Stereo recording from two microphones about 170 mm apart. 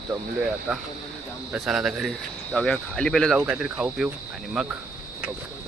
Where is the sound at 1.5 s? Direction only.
5° right (ahead or behind).